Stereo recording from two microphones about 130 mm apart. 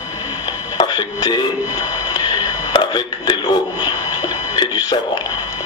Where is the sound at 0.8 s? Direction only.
30° left (ahead or behind).